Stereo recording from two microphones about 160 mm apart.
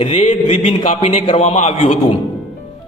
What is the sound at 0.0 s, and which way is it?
A man's voice, 40° left (ahead or behind).